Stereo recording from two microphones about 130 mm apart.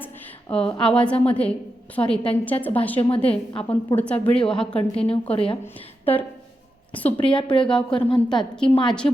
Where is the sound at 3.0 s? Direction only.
45° left (ahead or behind).